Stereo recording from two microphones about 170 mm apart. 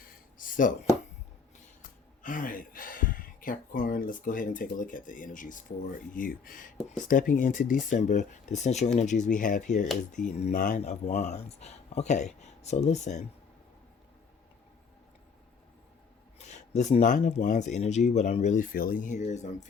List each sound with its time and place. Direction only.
0.0 s a sound: 55° left (ahead or behind)
2.2 s speech: 50° left (ahead or behind)
16.4 s speech: 40° left (ahead or behind)